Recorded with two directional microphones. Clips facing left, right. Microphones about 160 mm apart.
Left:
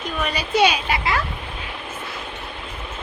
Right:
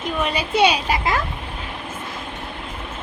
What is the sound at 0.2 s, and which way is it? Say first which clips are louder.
Speech: right 1 dB; 25° right (ahead or behind).